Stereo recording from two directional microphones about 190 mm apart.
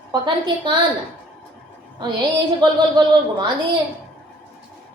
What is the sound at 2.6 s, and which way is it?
Speech, 25° right (ahead or behind).